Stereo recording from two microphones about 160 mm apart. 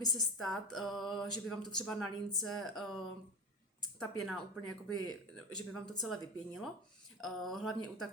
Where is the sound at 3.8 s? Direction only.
Centre (ahead or behind).